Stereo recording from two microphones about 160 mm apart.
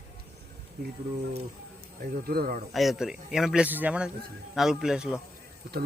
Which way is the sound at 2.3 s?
70° right (ahead or behind).